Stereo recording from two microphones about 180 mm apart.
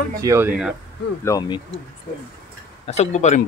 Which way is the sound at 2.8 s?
40° left (ahead or behind).